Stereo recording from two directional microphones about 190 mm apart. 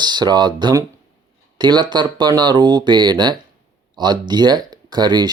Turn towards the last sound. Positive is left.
turn(degrees=-20)  # may be behind; listen again after turning